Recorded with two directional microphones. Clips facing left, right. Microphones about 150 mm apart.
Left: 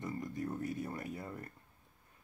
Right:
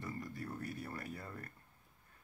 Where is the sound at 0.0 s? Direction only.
20° left (ahead or behind).